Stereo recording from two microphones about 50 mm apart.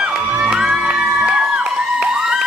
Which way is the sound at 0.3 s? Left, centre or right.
Right.